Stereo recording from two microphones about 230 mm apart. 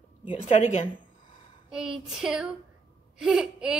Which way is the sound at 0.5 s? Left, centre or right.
Left.